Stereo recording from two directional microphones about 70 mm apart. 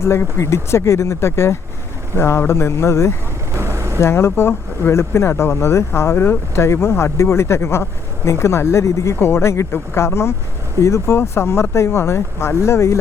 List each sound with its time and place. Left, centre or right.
0.0 s speech: left
3.6 s vehicle: right
4.0 s speech: left